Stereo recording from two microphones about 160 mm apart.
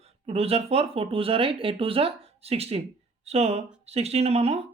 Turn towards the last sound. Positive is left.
turn(degrees=-40)  # may be behind; listen again after turning